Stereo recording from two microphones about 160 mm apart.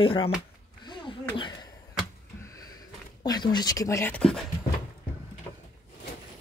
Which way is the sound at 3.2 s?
25° left (ahead or behind).